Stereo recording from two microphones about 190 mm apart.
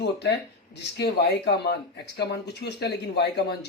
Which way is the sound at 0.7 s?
65° left (ahead or behind).